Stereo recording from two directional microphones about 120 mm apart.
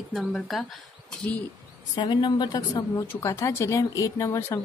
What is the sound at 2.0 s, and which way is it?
A woman's voice, 40° left (ahead or behind).